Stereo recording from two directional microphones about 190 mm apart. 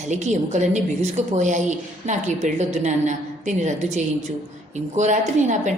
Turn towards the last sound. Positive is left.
turn(degrees=-40)  # may be behind; listen again after turning